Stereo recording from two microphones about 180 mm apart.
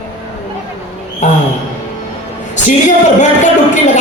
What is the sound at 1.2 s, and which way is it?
Speech, 40° left (ahead or behind).